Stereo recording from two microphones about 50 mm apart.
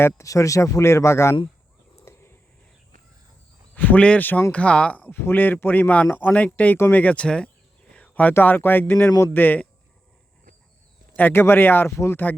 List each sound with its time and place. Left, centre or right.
0.0 s speech: left
2.0 s a sound: left
3.8 s speech: left
4.2 s speech: left
4.5 s speech: left
6.3 s speech: left
6.9 s a sound: left
8.3 s speech: left
11.2 s speech: left
11.9 s speech: left